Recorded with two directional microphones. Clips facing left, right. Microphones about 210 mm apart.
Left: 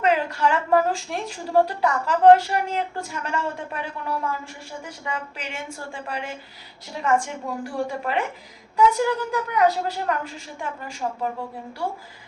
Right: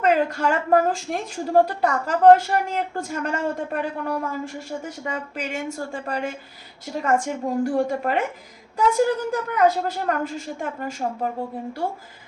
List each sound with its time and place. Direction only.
0.0 s a woman's voice: 50° right (ahead or behind)